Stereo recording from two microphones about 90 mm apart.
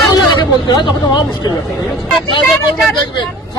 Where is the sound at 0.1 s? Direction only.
55° left (ahead or behind).